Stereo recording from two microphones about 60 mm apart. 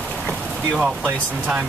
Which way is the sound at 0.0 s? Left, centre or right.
Centre.